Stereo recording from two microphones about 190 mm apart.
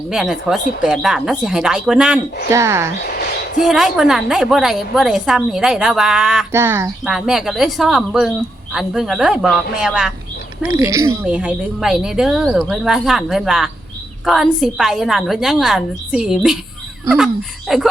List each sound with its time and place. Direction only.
0.1 s a woman's voice: centre (ahead or behind)
2.5 s a woman's voice: 15° right (ahead or behind)
3.6 s a woman's voice: 5° right (ahead or behind)
7.0 s a woman's voice: centre (ahead or behind)
10.7 s a woman's voice: 20° right (ahead or behind)
11.3 s a woman's voice: 5° right (ahead or behind)
17.7 s a woman's voice: centre (ahead or behind)